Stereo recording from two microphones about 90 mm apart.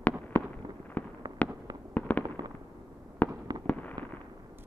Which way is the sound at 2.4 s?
50° right (ahead or behind).